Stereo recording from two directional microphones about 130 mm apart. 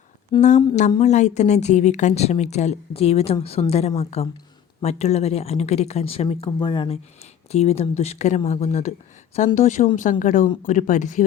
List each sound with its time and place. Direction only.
0.3 s a sound: 35° left (ahead or behind)
0.9 s a woman's voice: 60° left (ahead or behind); by 7.0 s 45° left (ahead or behind)
7.5 s a woman's voice: 55° left (ahead or behind); by 11.2 s 80° left